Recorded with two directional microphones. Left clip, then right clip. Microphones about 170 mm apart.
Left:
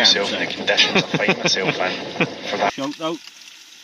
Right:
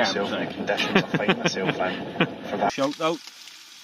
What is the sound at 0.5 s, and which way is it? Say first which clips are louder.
Speech: left 6 dB; 15° right (ahead or behind).